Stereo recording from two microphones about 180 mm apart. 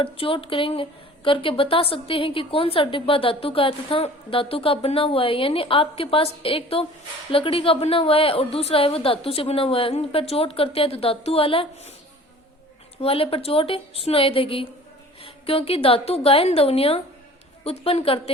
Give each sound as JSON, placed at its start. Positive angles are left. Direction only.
{"t": 0.0, "sound": "a woman's voice", "side_deg": 30}
{"t": 13.0, "sound": "a woman's voice", "side_deg": 30}